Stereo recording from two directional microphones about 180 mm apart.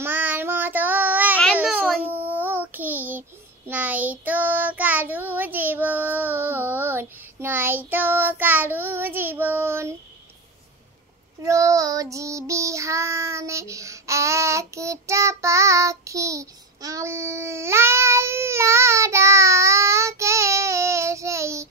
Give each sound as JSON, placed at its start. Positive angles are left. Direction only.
{"t": 0.0, "sound": "child singing", "side_deg": -10}
{"t": 11.4, "sound": "child singing", "side_deg": -15}